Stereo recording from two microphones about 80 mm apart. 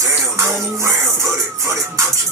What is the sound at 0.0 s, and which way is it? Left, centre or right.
Music, right.